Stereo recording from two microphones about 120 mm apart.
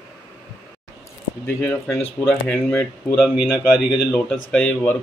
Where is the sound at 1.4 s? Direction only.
15° left (ahead or behind).